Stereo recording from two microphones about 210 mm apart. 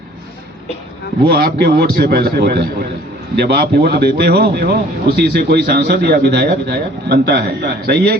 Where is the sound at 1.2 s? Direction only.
45° right (ahead or behind).